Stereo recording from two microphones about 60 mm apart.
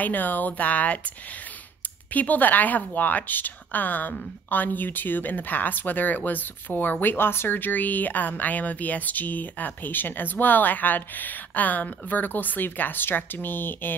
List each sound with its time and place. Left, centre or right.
0.0 s a woman's voice: left
2.1 s a woman's voice: left